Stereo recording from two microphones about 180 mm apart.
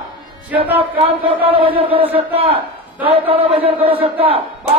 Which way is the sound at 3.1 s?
30° right (ahead or behind).